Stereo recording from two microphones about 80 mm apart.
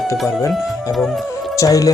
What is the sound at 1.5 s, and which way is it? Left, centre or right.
Speech, left.